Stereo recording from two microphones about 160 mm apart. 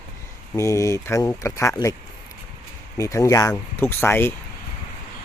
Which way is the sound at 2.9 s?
20° left (ahead or behind).